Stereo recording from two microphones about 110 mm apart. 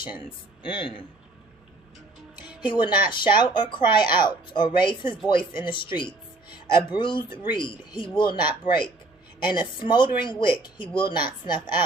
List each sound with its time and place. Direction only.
0.2 s speech: 50° left (ahead or behind)
2.6 s speech: 45° left (ahead or behind)